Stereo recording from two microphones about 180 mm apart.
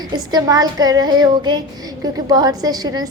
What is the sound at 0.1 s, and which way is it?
A woman's voice, 20° right (ahead or behind).